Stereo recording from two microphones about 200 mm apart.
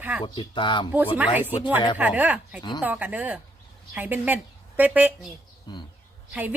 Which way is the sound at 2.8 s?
10° right (ahead or behind).